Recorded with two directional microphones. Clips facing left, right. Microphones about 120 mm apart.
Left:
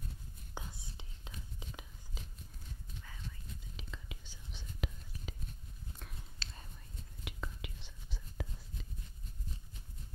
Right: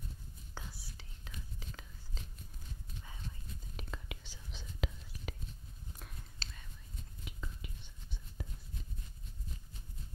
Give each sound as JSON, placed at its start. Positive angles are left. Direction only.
{"t": 0.6, "sound": "whispering", "side_deg": 20}
{"t": 2.2, "sound": "a sound", "side_deg": 10}
{"t": 3.7, "sound": "whispering", "side_deg": -60}
{"t": 7.2, "sound": "whispering", "side_deg": 80}